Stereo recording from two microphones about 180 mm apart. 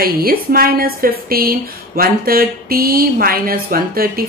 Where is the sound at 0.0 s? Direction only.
55° right (ahead or behind).